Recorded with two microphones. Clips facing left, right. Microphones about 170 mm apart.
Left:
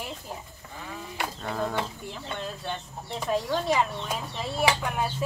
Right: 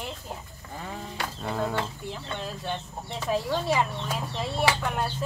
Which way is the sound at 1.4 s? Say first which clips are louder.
Right 2 dB; 5° right (ahead or behind).